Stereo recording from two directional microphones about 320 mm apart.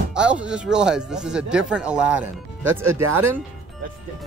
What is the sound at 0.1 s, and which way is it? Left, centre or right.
Speech, centre.